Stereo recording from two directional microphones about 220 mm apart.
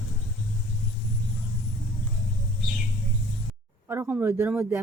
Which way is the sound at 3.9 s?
10° right (ahead or behind).